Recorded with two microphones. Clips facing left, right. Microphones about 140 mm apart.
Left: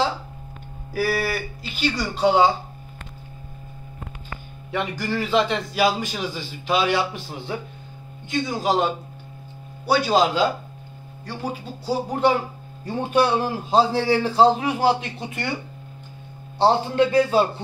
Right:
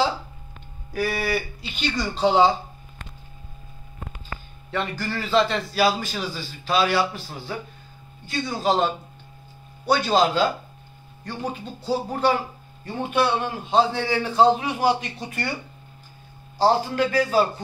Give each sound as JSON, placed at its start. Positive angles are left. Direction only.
{"t": 0.9, "sound": "speech", "side_deg": 5}
{"t": 4.6, "sound": "a man's voice", "side_deg": 15}
{"t": 11.8, "sound": "a man's voice", "side_deg": 15}
{"t": 12.8, "sound": "a man's voice", "side_deg": 35}
{"t": 16.5, "sound": "a man's voice", "side_deg": 25}